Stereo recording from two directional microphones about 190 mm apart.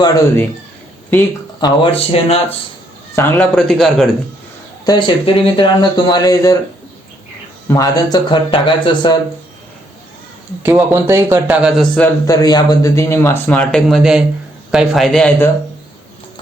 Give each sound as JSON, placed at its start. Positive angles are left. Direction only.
{"t": 0.0, "sound": "speech", "side_deg": 20}
{"t": 1.6, "sound": "speech", "side_deg": 30}
{"t": 3.2, "sound": "speech", "side_deg": 5}
{"t": 4.9, "sound": "speech", "side_deg": 25}
{"t": 7.7, "sound": "speech", "side_deg": 20}
{"t": 10.6, "sound": "speech", "side_deg": -10}
{"t": 12.2, "sound": "speech", "side_deg": 20}